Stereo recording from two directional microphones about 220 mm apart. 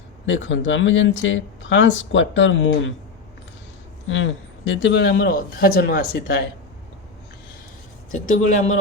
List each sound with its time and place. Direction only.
0.3 s speech: 55° left (ahead or behind)
4.1 s speech: 55° left (ahead or behind)
8.1 s speech: 35° left (ahead or behind)